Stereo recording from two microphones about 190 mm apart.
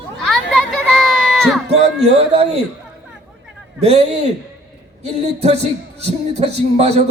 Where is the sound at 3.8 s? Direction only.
30° right (ahead or behind).